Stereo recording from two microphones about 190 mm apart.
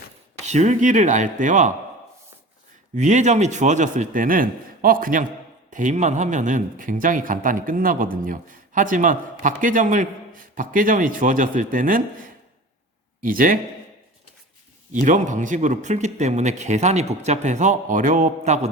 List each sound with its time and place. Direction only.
0.4 s a man's voice: 40° right (ahead or behind)
2.9 s a man's voice: 40° right (ahead or behind)
13.2 s speech: 45° right (ahead or behind)
14.9 s a man's voice: 40° right (ahead or behind)